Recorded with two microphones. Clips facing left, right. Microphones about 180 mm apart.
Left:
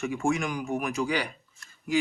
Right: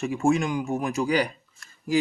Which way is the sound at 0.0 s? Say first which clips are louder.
Right 4 dB; 35° right (ahead or behind).